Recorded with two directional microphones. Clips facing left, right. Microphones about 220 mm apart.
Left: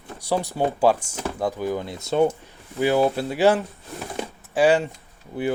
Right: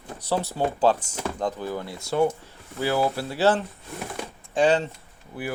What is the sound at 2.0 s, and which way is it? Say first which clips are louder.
Speech: left 3 dB; 25° left (ahead or behind).